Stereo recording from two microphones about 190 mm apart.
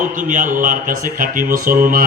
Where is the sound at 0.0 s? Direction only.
45° right (ahead or behind).